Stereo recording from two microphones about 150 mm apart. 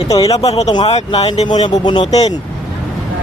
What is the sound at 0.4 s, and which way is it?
Speech, 45° left (ahead or behind).